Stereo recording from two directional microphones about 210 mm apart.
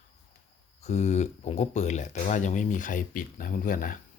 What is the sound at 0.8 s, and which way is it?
Speech, 30° left (ahead or behind).